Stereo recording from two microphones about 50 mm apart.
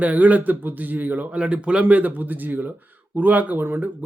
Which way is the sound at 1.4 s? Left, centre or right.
Right.